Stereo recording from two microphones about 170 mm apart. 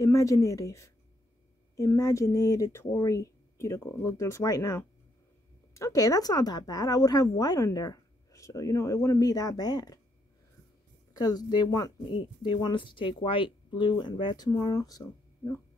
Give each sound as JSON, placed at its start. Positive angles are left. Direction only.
{"t": 0.0, "sound": "speech", "side_deg": 20}
{"t": 11.1, "sound": "speech", "side_deg": 25}